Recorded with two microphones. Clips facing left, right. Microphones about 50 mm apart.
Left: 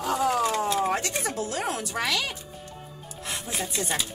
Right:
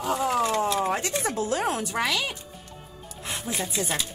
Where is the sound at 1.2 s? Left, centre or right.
Right.